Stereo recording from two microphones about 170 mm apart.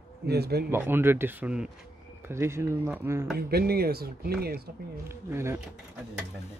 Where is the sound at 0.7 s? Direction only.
15° right (ahead or behind).